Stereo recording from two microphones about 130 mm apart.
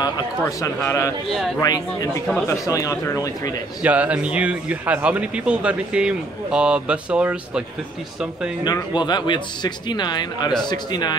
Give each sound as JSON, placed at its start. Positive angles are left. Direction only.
{"t": 0.4, "sound": "speech", "side_deg": 25}
{"t": 3.8, "sound": "speech", "side_deg": -10}
{"t": 8.6, "sound": "speech", "side_deg": 35}